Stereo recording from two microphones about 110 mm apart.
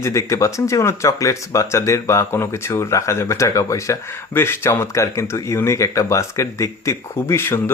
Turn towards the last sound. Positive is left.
turn(degrees=20)  # may be behind; listen again after turning